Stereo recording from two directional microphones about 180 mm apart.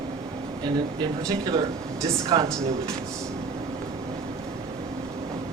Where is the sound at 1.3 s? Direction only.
20° right (ahead or behind).